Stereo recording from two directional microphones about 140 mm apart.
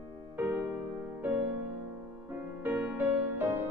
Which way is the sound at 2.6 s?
15° right (ahead or behind).